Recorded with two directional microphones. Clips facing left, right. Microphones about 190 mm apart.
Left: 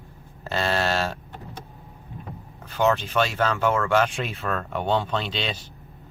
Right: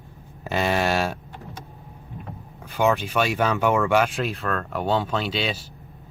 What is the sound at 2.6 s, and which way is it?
Speech, 10° right (ahead or behind).